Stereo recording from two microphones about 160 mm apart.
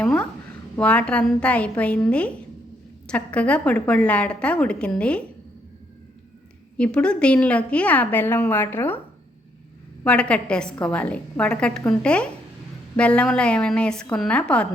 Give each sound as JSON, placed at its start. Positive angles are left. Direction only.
{"t": 0.0, "sound": "a woman's voice", "side_deg": 5}
{"t": 6.7, "sound": "a woman's voice", "side_deg": 5}
{"t": 10.0, "sound": "a woman's voice", "side_deg": 5}